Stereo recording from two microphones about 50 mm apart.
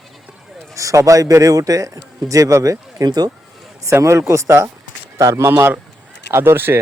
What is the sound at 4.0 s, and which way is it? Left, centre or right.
Speech, right.